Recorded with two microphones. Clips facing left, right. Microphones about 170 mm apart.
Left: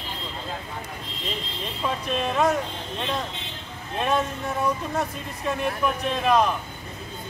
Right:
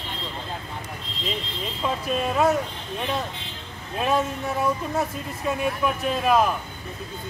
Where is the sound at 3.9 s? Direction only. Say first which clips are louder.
Right 1 dB; 5° right (ahead or behind).